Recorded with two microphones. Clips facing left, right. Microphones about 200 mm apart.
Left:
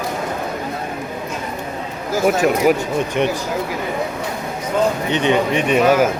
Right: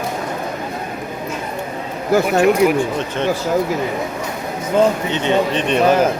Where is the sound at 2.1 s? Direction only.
60° right (ahead or behind).